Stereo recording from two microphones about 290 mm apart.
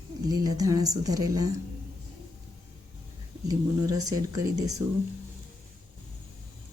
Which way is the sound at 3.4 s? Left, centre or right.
Centre.